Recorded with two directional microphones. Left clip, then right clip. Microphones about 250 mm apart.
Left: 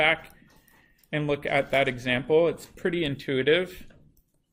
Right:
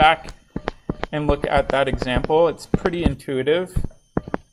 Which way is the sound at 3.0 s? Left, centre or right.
Centre.